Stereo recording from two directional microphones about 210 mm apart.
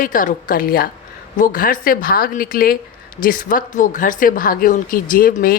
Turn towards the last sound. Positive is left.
turn(degrees=45)  # may be behind; listen again after turning